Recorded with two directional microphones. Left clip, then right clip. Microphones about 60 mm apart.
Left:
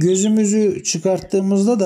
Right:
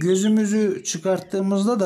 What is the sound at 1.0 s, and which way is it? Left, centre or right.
Speech, left.